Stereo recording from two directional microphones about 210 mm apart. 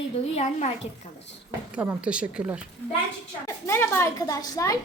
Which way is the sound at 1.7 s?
10° right (ahead or behind).